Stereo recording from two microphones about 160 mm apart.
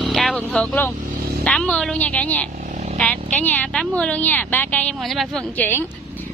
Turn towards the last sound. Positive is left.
turn(degrees=10)  # may be behind; listen again after turning